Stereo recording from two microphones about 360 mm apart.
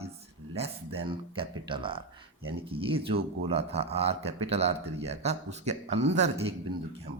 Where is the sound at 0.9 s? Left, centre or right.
Centre.